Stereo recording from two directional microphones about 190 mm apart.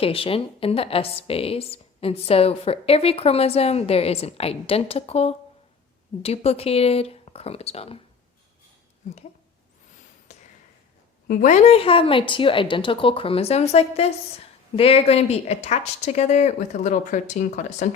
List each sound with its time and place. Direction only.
0.0 s a woman's voice: 30° left (ahead or behind)
9.0 s a woman's voice: 40° left (ahead or behind)
10.3 s a sound: 35° left (ahead or behind)
11.3 s a woman's voice: 40° left (ahead or behind)